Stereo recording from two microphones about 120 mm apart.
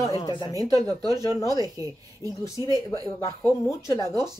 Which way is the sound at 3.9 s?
25° left (ahead or behind).